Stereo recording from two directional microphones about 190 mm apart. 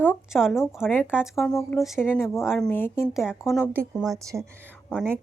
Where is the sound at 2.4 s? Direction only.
Centre (ahead or behind).